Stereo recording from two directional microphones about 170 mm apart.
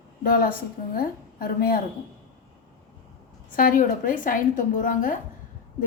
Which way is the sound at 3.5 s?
55° left (ahead or behind).